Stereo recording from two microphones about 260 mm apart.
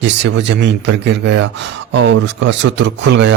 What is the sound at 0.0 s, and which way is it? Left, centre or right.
Speech, right.